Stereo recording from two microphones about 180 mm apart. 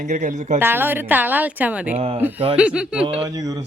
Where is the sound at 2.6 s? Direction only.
5° right (ahead or behind).